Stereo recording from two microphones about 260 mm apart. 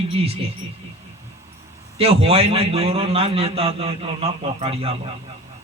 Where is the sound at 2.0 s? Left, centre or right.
Right.